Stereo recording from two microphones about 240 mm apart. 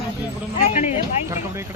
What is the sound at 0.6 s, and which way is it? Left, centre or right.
Speech, left.